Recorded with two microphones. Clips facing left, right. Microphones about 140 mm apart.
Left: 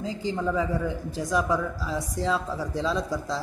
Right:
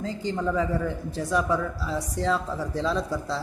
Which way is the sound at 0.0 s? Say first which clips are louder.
Even; 5° left (ahead or behind).